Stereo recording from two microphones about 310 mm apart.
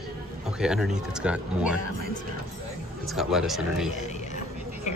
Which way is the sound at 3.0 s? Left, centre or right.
Centre.